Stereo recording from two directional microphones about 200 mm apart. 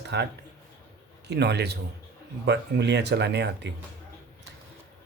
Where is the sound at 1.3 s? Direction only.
55° right (ahead or behind).